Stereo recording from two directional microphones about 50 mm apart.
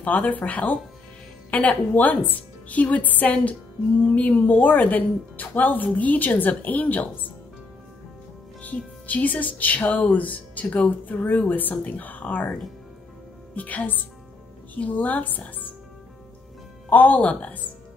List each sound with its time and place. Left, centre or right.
0.0 s speech: left
8.6 s speech: left
13.6 s speech: left
16.9 s speech: left